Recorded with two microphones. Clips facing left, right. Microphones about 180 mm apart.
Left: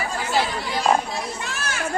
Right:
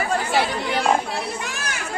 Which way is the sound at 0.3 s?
65° right (ahead or behind).